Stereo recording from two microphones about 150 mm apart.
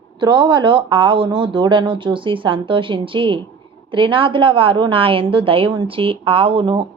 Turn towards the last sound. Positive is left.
turn(degrees=-35)  # may be behind; listen again after turning